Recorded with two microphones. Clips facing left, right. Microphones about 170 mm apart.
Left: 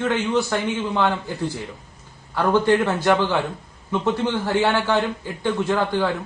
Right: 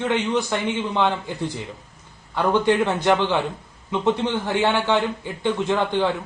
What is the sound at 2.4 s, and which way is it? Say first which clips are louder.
Speech: left 1 dB; 15° right (ahead or behind).